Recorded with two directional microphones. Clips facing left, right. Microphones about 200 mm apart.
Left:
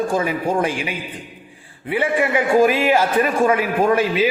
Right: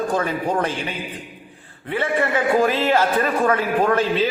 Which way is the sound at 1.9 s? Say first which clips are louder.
Left 2 dB; 15° left (ahead or behind).